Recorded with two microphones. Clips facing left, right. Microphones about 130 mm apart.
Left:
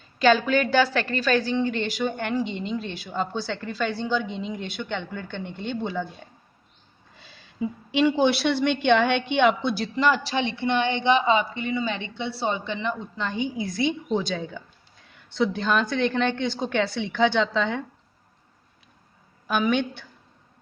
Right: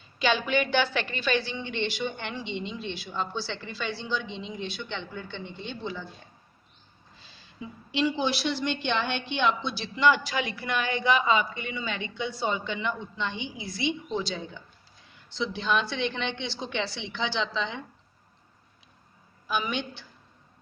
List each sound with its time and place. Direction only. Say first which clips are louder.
0.2 s a woman's voice: left 6 dB; 45° left (ahead or behind)
7.6 s a woman's voice: left 6 dB; 60° left (ahead or behind)
19.5 s a woman's voice: left 7 dB; 55° left (ahead or behind)